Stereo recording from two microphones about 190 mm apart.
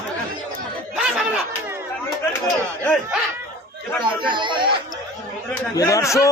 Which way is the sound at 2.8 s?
Centre (ahead or behind).